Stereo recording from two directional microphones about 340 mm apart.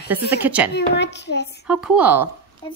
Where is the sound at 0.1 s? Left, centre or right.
Centre.